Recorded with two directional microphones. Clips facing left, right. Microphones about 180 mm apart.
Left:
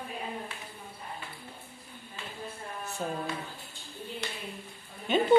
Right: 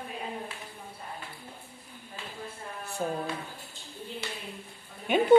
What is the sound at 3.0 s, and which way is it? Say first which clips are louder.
Speech: right 3 dB; 10° right (ahead or behind).